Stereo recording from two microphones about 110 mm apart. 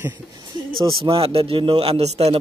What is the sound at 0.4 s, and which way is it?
A man's voice, 50° right (ahead or behind).